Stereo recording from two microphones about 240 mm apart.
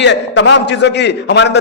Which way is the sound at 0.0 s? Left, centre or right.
Left.